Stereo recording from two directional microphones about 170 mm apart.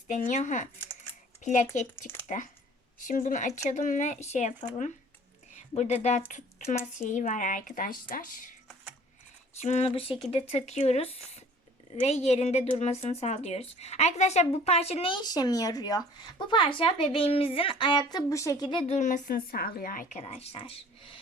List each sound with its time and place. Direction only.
0.1 s speech: 45° left (ahead or behind)
9.6 s a woman's voice: 40° left (ahead or behind)
20.2 s a woman's voice: 35° left (ahead or behind)